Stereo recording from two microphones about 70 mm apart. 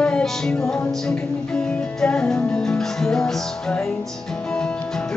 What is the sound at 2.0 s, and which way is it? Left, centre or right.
Music, centre.